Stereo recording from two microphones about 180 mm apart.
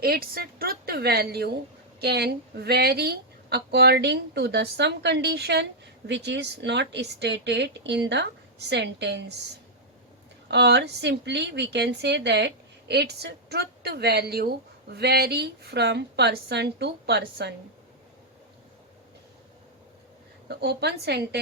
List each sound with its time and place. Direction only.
0.0 s a woman's voice: 60° right (ahead or behind)
10.5 s a woman's voice: 70° right (ahead or behind)
20.5 s a woman's voice: 65° right (ahead or behind)